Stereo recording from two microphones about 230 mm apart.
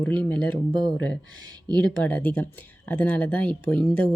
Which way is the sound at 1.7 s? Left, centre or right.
Centre.